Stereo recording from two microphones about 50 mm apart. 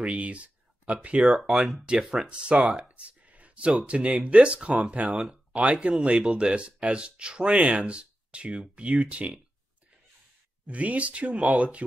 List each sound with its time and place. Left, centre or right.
0.0 s a sound: right
1.0 s speech: right
1.4 s speech: centre
2.6 s speech: centre
3.1 s speech: right
5.0 s speech: centre
10.7 s speech: right